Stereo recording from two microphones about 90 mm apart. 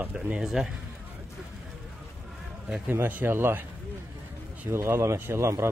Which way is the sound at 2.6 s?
10° right (ahead or behind).